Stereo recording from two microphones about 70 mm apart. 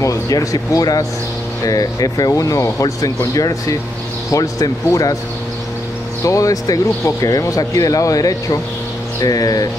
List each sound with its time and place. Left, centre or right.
0.0 s speech: left
6.2 s speech: left